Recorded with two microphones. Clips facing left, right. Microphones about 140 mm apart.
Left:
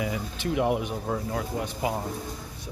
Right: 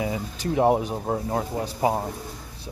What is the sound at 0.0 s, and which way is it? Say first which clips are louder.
Speech: right 2 dB; 35° right (ahead or behind).